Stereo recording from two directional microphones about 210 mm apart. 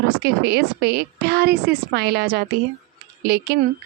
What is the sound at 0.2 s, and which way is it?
A woman's voice, 50° right (ahead or behind).